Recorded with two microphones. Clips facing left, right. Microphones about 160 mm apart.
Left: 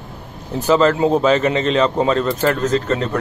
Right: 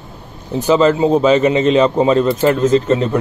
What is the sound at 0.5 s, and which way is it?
Speech, centre (ahead or behind).